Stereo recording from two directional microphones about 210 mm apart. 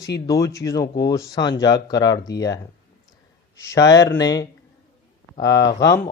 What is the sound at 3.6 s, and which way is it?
Speech, 15° left (ahead or behind).